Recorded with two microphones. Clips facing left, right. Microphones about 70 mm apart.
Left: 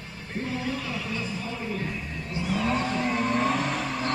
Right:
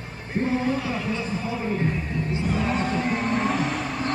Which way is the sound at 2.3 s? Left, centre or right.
Right.